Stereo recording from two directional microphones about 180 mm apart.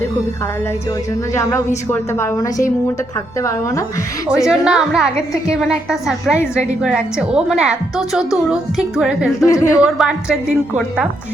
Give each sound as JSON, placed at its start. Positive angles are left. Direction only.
{"t": 1.3, "sound": "a woman's voice", "side_deg": 15}
{"t": 4.4, "sound": "a woman's voice", "side_deg": -5}
{"t": 9.5, "sound": "a woman's voice", "side_deg": 15}
{"t": 9.8, "sound": "a woman's voice", "side_deg": -5}